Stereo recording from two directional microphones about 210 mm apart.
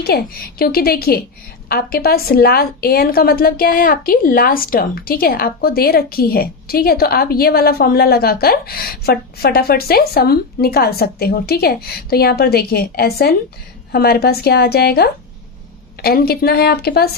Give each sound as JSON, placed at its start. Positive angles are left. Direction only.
{"t": 0.1, "sound": "a woman's voice", "side_deg": 50}